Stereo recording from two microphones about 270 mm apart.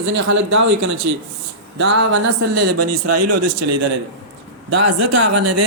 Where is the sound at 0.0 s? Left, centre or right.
Right.